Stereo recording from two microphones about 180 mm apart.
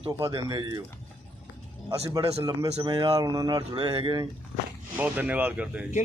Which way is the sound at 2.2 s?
35° right (ahead or behind).